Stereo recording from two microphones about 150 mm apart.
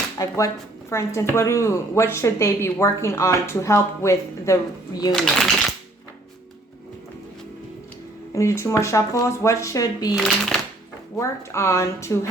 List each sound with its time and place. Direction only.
0.2 s speech: 20° left (ahead or behind)
5.1 s speech: centre (ahead or behind)
8.3 s speech: 20° left (ahead or behind)
10.2 s speech: centre (ahead or behind)
11.2 s speech: 20° left (ahead or behind)